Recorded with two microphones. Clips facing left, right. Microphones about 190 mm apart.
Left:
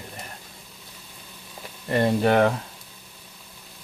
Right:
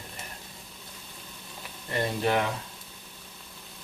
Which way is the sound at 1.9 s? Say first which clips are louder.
Left 7 dB; 60° left (ahead or behind).